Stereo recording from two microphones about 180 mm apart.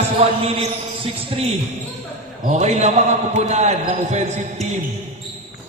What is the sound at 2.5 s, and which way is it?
Speech, 40° right (ahead or behind).